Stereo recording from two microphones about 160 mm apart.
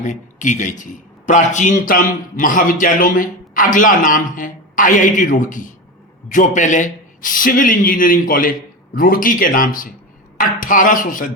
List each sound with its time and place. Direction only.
0.0 s a man's voice: 50° left (ahead or behind)